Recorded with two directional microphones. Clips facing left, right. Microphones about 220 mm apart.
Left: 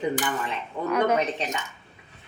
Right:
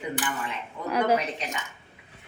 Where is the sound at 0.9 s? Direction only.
30° right (ahead or behind).